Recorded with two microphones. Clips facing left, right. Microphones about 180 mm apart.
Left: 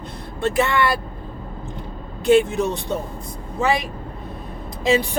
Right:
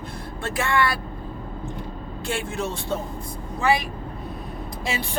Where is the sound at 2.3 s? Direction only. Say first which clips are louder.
Left 12 dB; 20° left (ahead or behind).